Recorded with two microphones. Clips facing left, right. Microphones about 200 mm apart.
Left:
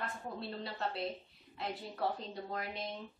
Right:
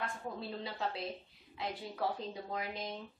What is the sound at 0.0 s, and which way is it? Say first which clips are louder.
A woman's voice: right 1 dB; centre (ahead or behind).